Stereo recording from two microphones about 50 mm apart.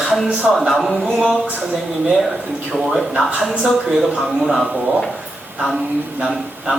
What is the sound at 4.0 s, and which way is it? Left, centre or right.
Speech, centre.